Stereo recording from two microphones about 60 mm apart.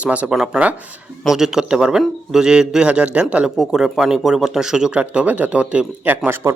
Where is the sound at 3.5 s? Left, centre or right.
Centre.